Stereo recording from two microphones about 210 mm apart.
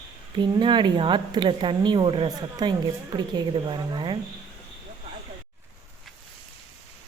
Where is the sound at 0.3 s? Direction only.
20° right (ahead or behind).